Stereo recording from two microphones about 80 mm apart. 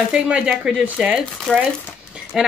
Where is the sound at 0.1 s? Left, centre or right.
Centre.